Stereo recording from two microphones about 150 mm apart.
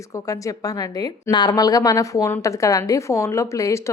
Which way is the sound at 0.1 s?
20° left (ahead or behind).